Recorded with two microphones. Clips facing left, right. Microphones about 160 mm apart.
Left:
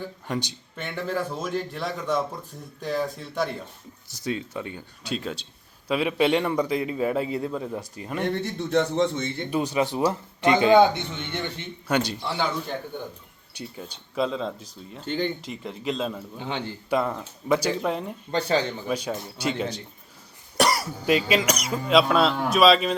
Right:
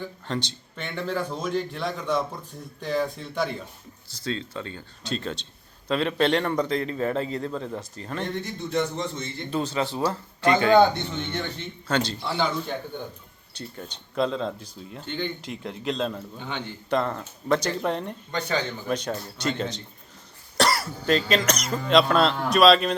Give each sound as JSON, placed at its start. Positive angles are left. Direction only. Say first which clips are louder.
{"t": 0.0, "sound": "speech", "louder": "left 1 dB", "side_deg": 10}
{"t": 4.2, "sound": "a man's voice", "louder": "left 1 dB", "side_deg": 15}
{"t": 8.3, "sound": "a man's voice", "louder": "left 6 dB", "side_deg": 70}
{"t": 9.5, "sound": "a man's voice", "louder": "left 2 dB", "side_deg": 15}
{"t": 11.9, "sound": "a man's voice", "louder": "left 1 dB", "side_deg": 15}
{"t": 12.3, "sound": "speech", "louder": "right 3 dB", "side_deg": 0}
{"t": 15.0, "sound": "speech", "louder": "left 4 dB", "side_deg": 35}
{"t": 15.4, "sound": "speech", "louder": "even", "side_deg": 0}
{"t": 16.4, "sound": "speech", "louder": "left 4 dB", "side_deg": 30}
{"t": 16.9, "sound": "a man's voice", "louder": "even", "side_deg": 5}
{"t": 18.3, "sound": "speech", "louder": "left 4 dB", "side_deg": 30}
{"t": 18.9, "sound": "a man's voice", "louder": "even", "side_deg": 5}